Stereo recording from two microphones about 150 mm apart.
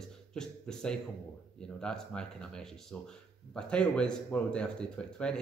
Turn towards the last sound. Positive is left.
turn(degrees=5)  # may be behind; listen again after turning